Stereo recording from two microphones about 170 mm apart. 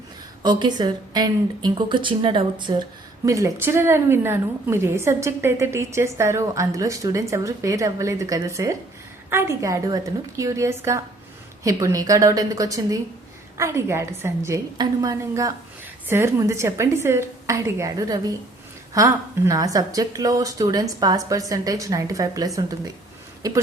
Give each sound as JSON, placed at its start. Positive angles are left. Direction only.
{"t": 0.4, "sound": "a woman's voice", "side_deg": -25}